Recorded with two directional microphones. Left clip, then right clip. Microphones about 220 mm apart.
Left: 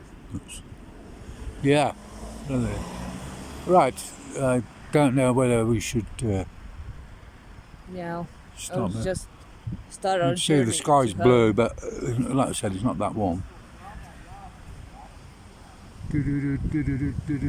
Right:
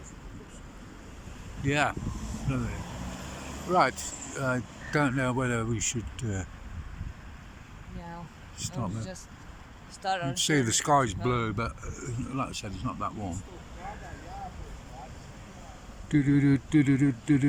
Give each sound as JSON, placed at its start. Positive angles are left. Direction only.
{"t": 1.6, "sound": "speech", "side_deg": 20}
{"t": 7.9, "sound": "speech", "side_deg": 45}
{"t": 10.3, "sound": "speech", "side_deg": 15}
{"t": 16.1, "sound": "speech", "side_deg": 0}